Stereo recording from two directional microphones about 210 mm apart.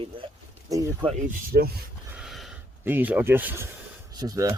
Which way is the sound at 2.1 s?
Centre (ahead or behind).